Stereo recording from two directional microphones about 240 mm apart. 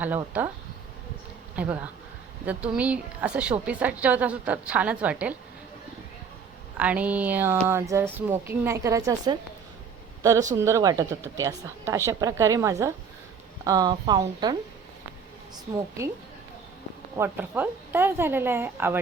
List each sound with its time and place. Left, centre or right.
0.3 s a woman's voice: centre
1.5 s a woman's voice: centre
6.7 s a woman's voice: centre
10.5 s a woman's voice: centre
17.2 s a woman's voice: centre